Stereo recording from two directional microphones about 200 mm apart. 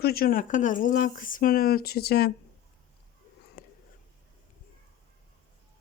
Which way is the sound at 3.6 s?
50° left (ahead or behind).